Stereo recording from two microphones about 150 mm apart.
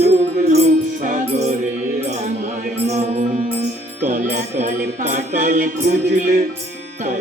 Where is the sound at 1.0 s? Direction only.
60° right (ahead or behind).